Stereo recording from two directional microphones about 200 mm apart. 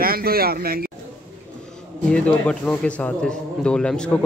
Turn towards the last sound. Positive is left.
turn(degrees=5)  # may be behind; listen again after turning